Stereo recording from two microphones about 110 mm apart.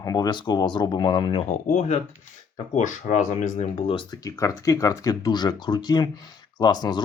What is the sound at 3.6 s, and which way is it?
Speech, 60° left (ahead or behind).